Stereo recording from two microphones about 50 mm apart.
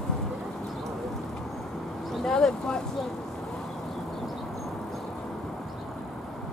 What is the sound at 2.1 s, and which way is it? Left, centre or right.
Vehicle, centre.